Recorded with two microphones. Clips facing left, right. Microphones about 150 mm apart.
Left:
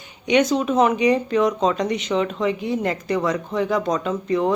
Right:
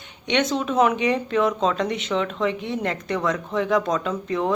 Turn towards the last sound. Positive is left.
turn(degrees=0)  # may be behind; listen again after turning